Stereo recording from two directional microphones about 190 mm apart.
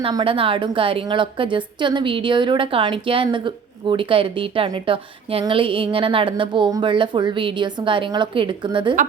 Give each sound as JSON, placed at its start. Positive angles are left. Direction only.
{"t": 0.0, "sound": "a woman's voice", "side_deg": -25}